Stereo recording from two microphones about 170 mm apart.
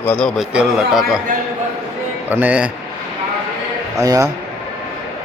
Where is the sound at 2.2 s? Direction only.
10° right (ahead or behind).